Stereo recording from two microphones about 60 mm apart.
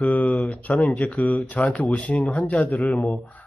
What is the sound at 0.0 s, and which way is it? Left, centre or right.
A man's voice, left.